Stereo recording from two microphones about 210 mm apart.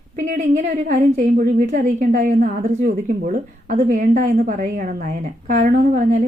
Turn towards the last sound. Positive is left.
turn(degrees=-40)  # may be behind; listen again after turning